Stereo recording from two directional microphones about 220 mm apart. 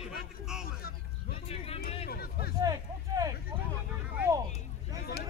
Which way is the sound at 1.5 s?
25° left (ahead or behind).